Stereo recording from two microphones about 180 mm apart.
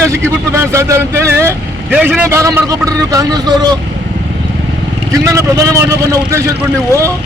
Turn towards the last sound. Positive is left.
turn(degrees=-15)  # may be behind; listen again after turning